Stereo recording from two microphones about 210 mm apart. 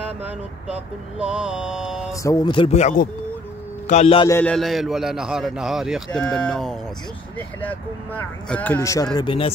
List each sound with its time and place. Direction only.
1.2 s a man's voice: 5° right (ahead or behind)
2.2 s a man's voice: 20° left (ahead or behind)
4.3 s a man's voice: 10° left (ahead or behind); by 9.5 s 25° left (ahead or behind)